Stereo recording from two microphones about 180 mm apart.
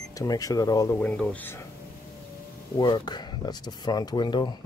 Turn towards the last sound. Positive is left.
turn(degrees=25)  # may be behind; listen again after turning